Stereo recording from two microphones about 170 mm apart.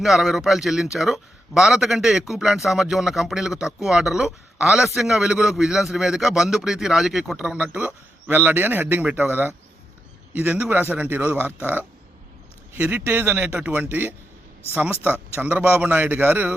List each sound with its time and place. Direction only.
0.0 s a man's voice: centre (ahead or behind)